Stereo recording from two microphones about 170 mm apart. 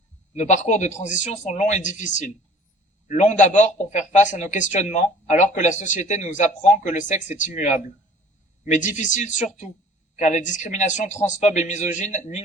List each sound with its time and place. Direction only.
0.3 s speech: 45° left (ahead or behind)
3.1 s speech: 45° left (ahead or behind)